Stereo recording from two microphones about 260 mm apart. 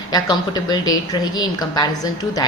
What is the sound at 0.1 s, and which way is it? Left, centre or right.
A woman's voice, centre.